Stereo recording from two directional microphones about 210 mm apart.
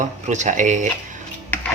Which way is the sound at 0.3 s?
35° right (ahead or behind).